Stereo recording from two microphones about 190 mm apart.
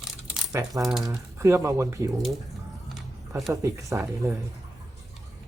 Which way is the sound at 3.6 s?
15° right (ahead or behind).